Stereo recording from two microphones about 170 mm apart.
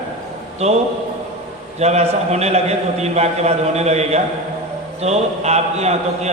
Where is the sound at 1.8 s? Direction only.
40° right (ahead or behind).